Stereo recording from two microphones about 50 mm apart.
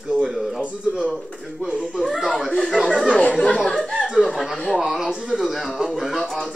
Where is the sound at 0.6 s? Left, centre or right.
Right.